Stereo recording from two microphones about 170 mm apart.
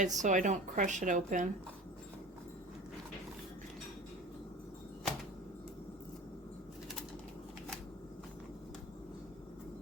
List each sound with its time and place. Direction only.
0.0 s a woman's voice: 45° right (ahead or behind)